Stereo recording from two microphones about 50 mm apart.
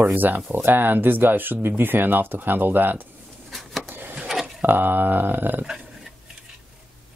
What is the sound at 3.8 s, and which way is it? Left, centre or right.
Wood, right.